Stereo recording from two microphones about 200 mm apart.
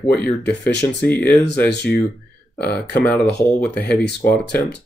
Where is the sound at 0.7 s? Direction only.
60° left (ahead or behind).